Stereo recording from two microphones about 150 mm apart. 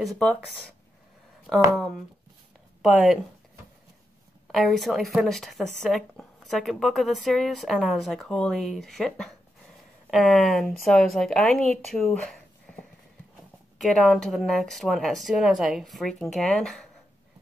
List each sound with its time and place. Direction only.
0.0 s speech: centre (ahead or behind)
2.8 s speech: centre (ahead or behind)
4.5 s speech: centre (ahead or behind)